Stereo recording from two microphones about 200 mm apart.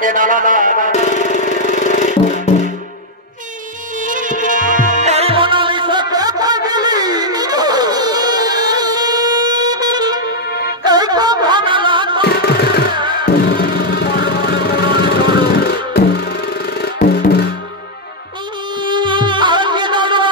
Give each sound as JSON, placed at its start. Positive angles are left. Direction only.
{"t": 0.0, "sound": "a man's voice", "side_deg": -40}
{"t": 0.9, "sound": "music", "side_deg": 35}
{"t": 4.0, "sound": "music", "side_deg": -40}
{"t": 10.9, "sound": "a sound", "side_deg": -20}
{"t": 12.2, "sound": "music", "side_deg": 55}
{"t": 18.8, "sound": "music", "side_deg": -25}